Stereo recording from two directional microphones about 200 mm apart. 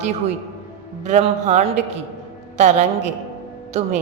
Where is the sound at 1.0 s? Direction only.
35° right (ahead or behind).